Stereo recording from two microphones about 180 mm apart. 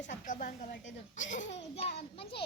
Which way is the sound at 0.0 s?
45° left (ahead or behind).